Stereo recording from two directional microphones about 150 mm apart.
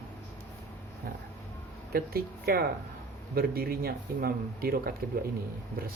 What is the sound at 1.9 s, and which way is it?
Speech, 85° right.